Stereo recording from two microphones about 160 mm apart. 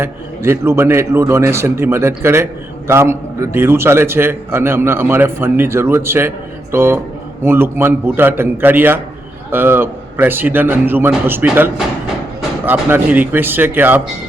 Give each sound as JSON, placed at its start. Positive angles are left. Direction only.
{"t": 0.0, "sound": "a man's voice", "side_deg": -15}